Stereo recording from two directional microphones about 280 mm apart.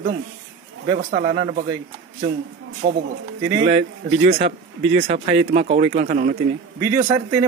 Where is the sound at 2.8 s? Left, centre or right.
Right.